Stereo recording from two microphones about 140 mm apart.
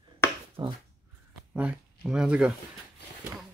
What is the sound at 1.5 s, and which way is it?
Speech, 5° right (ahead or behind).